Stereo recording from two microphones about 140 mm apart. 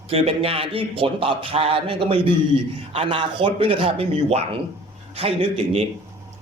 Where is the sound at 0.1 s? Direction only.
45° right (ahead or behind).